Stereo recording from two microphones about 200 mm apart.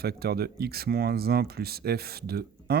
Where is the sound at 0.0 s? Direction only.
50° right (ahead or behind).